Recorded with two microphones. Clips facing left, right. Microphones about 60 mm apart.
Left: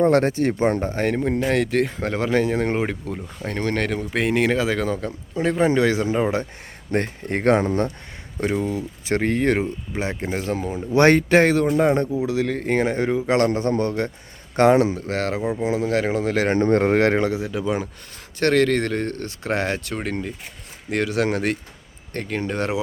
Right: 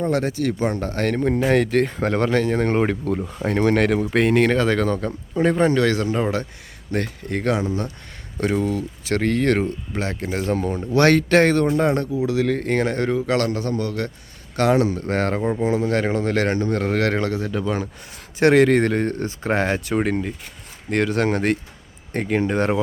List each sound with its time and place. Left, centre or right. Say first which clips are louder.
0.0 s a man's voice: left 4 dB; left; by 1.2 s centre
1.2 s speech: right 6 dB; centre
5.6 s speech: even; centre
6.9 s speech: left 1 dB; left
8.4 s speech: right 2 dB; centre
10.3 s speech: right 6 dB; centre
10.9 s speech: left 1 dB; left
11.9 s a man's voice: even; left
12.5 s a man's voice: right 1 dB; centre
14.9 s speech: right 2 dB; centre
16.6 s speech: left 5 dB; left
16.9 s speech: left 3 dB; left
18.3 s speech: right 4 dB; centre
22.1 s speech: right 5 dB; centre